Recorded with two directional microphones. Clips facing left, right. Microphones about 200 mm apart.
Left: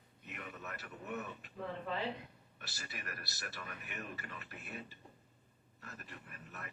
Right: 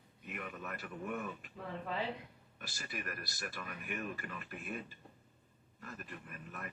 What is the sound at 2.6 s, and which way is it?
A man's voice, 50° right (ahead or behind).